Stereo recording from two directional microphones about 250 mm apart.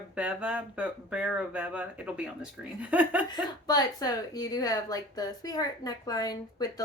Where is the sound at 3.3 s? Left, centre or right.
Centre.